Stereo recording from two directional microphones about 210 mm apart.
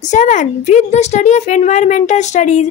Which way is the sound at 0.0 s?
35° left (ahead or behind).